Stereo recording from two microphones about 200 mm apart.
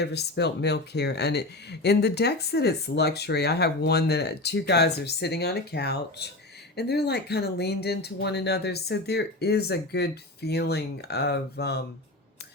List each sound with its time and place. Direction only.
0.0 s speech: 55° left (ahead or behind)